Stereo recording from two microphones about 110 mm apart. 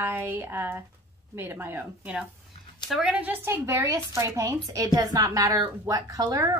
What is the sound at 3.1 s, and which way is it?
A woman's voice, 15° right (ahead or behind).